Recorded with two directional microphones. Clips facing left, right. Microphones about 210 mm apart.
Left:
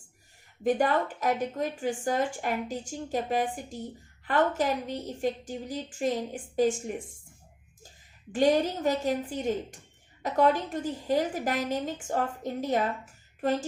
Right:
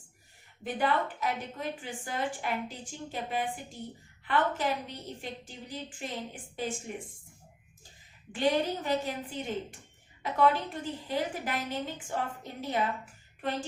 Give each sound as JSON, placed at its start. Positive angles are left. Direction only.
{"t": 0.6, "sound": "a woman's voice", "side_deg": 45}
{"t": 8.3, "sound": "a woman's voice", "side_deg": 45}